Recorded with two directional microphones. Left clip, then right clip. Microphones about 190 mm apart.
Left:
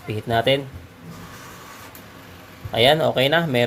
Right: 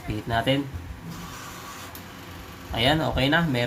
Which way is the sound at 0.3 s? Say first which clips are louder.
Left 5 dB; 45° left (ahead or behind).